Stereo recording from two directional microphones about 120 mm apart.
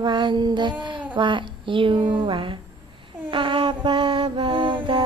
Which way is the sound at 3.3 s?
45° right (ahead or behind).